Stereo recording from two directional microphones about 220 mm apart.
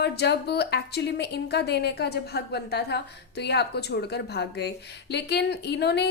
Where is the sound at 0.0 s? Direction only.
50° left (ahead or behind).